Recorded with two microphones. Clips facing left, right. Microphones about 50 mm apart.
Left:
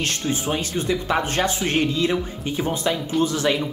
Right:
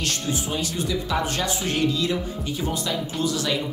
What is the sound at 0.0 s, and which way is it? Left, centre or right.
Speech, left.